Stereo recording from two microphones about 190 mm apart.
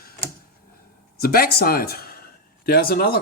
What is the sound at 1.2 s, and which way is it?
Speech, 55° left (ahead or behind).